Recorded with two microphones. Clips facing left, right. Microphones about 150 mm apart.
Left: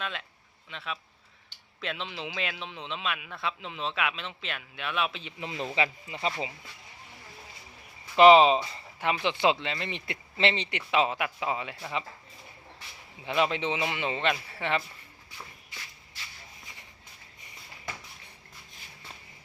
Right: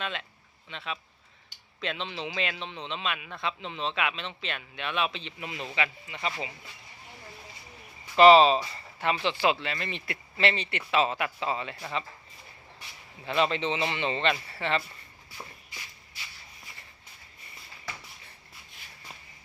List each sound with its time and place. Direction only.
0.0 s a man's voice: centre (ahead or behind)
5.4 s a man's voice: 30° left (ahead or behind)
8.1 s a man's voice: 15° left (ahead or behind)
13.2 s a man's voice: 10° left (ahead or behind)